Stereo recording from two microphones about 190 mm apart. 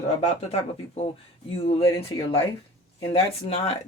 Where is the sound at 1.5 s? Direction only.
30° left (ahead or behind).